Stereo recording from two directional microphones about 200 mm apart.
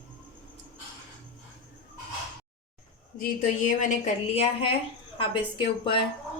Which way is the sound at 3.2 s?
40° left (ahead or behind).